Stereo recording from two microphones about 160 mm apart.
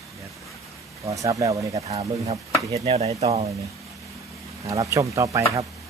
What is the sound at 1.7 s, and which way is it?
Speech, 40° right (ahead or behind).